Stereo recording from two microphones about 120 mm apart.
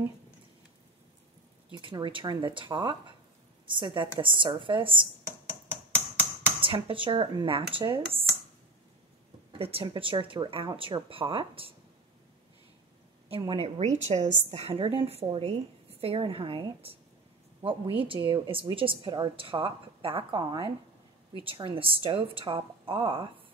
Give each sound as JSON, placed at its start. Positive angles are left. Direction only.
{"t": 1.7, "sound": "a woman's voice", "side_deg": -40}
{"t": 6.6, "sound": "a woman's voice", "side_deg": -50}
{"t": 9.5, "sound": "a woman's voice", "side_deg": -55}
{"t": 13.4, "sound": "a woman's voice", "side_deg": -45}
{"t": 13.7, "sound": "a woman's voice", "side_deg": -70}